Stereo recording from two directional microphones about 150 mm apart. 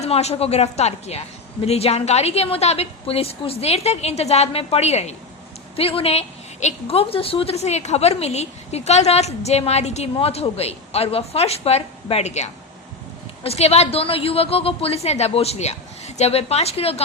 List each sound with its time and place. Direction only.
0.0 s a woman's voice: 45° left (ahead or behind)